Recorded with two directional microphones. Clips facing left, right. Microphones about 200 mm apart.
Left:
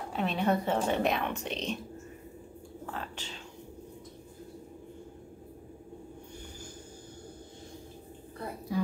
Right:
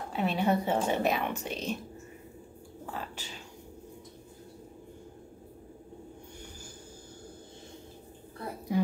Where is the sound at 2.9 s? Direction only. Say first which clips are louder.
Right 1 dB; 5° right (ahead or behind).